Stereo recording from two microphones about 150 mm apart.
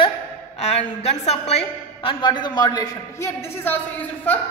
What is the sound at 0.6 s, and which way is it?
A woman's voice, 50° left (ahead or behind).